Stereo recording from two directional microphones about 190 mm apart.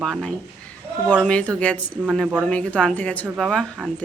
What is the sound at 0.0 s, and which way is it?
A woman's voice, 5° left (ahead or behind).